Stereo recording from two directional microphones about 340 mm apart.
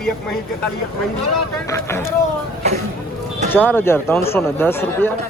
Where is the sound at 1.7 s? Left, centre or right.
Centre.